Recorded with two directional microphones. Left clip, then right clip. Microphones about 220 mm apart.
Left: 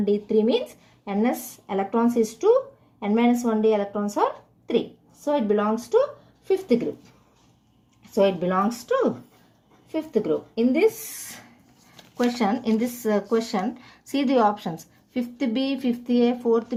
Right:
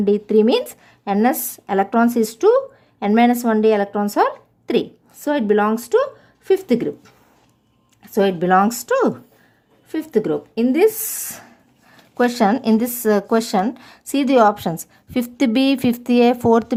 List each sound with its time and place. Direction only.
0.1 s a woman's voice: 40° right (ahead or behind)
8.1 s a woman's voice: 40° right (ahead or behind)